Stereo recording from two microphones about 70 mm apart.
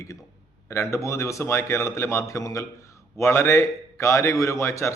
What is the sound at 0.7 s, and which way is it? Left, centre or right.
Speech, left.